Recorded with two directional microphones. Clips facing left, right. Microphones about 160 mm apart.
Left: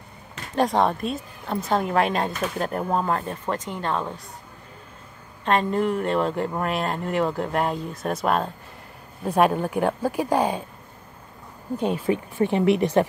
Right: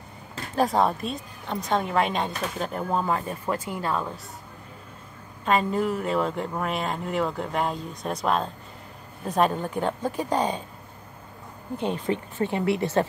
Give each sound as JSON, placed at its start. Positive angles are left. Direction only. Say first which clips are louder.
{"t": 0.6, "sound": "a woman's voice", "louder": "left 1 dB", "side_deg": 0}
{"t": 5.4, "sound": "a woman's voice", "louder": "left 2 dB", "side_deg": -5}
{"t": 11.8, "sound": "speech", "louder": "left 3 dB", "side_deg": 10}